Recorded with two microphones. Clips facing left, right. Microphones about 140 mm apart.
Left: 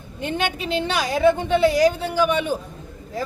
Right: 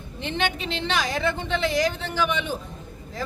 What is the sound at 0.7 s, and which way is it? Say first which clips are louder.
Speech: left 4 dB; 10° left (ahead or behind).